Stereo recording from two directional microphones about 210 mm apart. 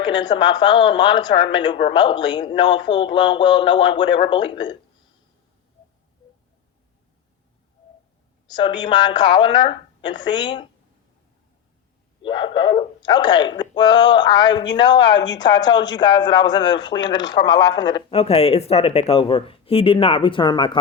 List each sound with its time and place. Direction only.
0.0 s speech: 20° left (ahead or behind)
8.4 s speech: 20° left (ahead or behind)
12.2 s speech: 25° left (ahead or behind)